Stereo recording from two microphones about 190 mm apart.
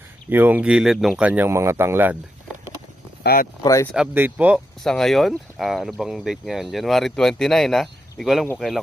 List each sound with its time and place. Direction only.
0.3 s speech: 10° right (ahead or behind)
3.2 s speech: 50° left (ahead or behind)
3.6 s speech: 15° left (ahead or behind)
3.9 s speech: 10° right (ahead or behind)